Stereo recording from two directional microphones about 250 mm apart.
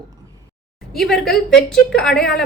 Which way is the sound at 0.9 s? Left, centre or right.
Centre.